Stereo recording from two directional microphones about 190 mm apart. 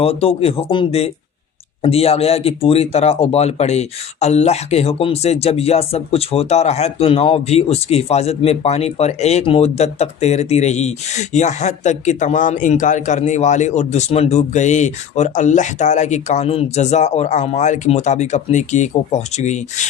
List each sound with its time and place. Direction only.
0.0 s speech: 30° left (ahead or behind)